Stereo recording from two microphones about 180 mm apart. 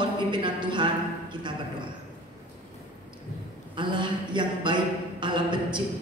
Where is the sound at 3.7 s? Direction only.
25° right (ahead or behind).